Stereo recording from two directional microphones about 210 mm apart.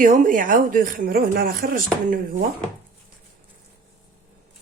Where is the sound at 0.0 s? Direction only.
40° right (ahead or behind).